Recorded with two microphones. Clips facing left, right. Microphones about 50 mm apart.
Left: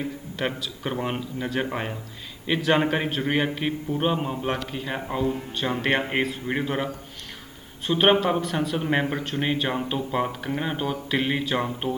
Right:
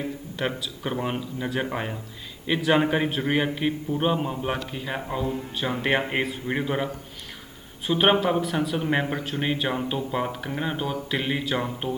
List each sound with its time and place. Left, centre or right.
0.3 s speech: centre